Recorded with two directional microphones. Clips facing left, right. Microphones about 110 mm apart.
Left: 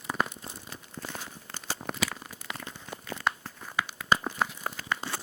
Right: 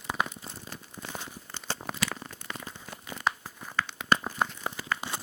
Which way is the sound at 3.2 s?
10° right (ahead or behind).